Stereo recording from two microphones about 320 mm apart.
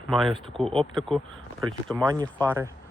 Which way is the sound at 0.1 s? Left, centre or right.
Centre.